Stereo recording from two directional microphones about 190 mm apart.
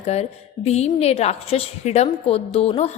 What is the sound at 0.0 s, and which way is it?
A woman's voice, 35° left (ahead or behind).